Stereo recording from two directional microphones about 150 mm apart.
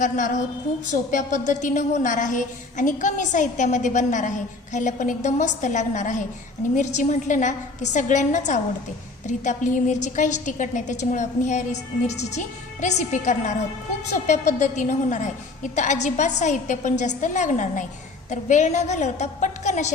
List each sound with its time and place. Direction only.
1.1 s a woman's voice: 60° left (ahead or behind)